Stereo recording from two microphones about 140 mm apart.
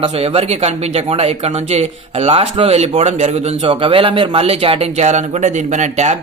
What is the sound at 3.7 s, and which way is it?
Speech, 40° right (ahead or behind).